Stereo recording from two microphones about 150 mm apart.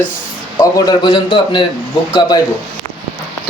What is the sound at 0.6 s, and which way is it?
A man's voice, 30° left (ahead or behind).